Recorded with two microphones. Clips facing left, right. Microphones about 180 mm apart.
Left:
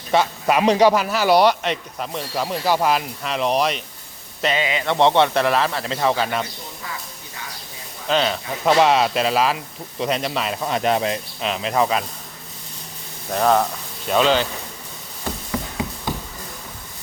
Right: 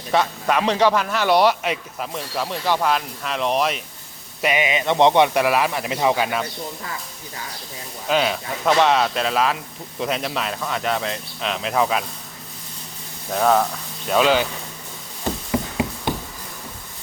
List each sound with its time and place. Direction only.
0.1 s a man's voice: 5° left (ahead or behind)
4.4 s speech: 15° right (ahead or behind)
8.0 s speech: 5° right (ahead or behind)
8.6 s a man's voice: 5° left (ahead or behind)
10.6 s speech: 25° left (ahead or behind)
11.3 s a man's voice: centre (ahead or behind)
13.3 s a man's voice: centre (ahead or behind)